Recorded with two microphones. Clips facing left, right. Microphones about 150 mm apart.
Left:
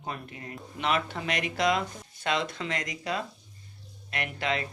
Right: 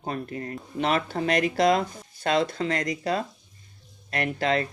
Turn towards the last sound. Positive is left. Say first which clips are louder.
# right 6 dB
turn(degrees=-40)  # may be behind; listen again after turning